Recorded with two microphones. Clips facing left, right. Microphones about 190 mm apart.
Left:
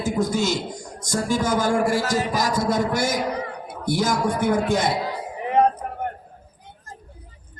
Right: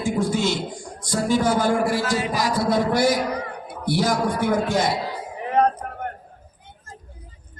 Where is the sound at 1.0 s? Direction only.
45° left (ahead or behind).